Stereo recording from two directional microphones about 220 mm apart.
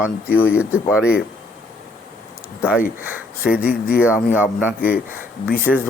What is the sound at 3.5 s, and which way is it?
Speech, 45° left (ahead or behind).